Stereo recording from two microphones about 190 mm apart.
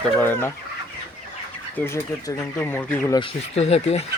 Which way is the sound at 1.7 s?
15° left (ahead or behind).